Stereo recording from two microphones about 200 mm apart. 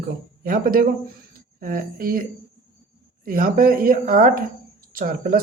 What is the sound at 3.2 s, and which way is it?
Speech, 45° right (ahead or behind).